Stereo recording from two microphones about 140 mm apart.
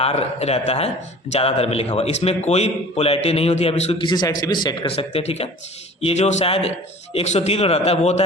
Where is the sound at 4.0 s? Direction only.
30° left (ahead or behind).